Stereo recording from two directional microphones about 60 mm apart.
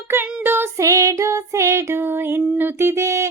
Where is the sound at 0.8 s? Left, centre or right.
Right.